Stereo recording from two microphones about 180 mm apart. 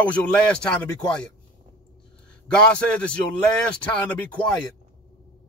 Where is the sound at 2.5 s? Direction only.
5° left (ahead or behind).